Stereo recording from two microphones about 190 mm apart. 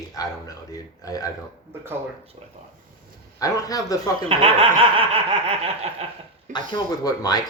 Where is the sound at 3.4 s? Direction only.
20° left (ahead or behind).